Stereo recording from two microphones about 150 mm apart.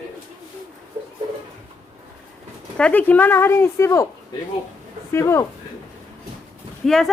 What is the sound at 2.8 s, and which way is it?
Speech, 10° left (ahead or behind).